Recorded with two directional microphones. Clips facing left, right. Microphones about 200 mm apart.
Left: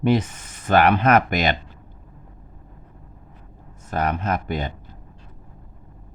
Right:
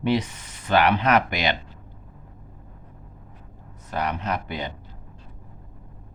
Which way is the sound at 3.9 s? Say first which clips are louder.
Left 3 dB; 45° left (ahead or behind).